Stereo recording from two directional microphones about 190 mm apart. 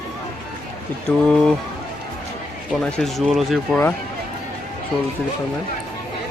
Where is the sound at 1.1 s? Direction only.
10° left (ahead or behind).